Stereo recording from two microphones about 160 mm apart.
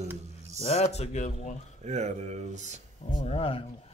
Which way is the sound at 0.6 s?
40° left (ahead or behind).